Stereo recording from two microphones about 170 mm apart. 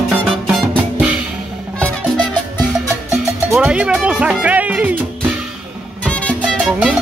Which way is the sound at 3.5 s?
5° right (ahead or behind).